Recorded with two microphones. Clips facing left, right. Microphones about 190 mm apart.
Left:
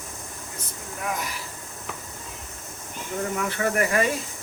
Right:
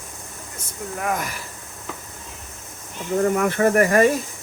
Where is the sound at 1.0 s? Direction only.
50° right (ahead or behind).